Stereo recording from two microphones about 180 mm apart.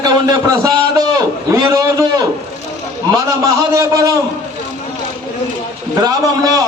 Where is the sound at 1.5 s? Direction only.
15° right (ahead or behind).